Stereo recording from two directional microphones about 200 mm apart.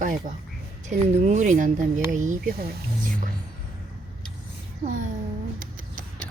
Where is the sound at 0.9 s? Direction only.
40° right (ahead or behind).